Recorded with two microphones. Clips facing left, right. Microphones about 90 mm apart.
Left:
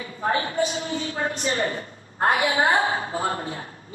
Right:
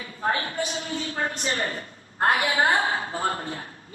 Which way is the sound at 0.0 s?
35° left (ahead or behind).